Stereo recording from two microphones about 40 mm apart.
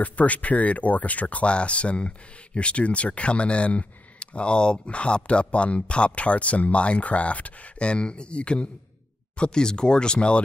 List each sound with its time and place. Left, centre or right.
0.0 s speech: left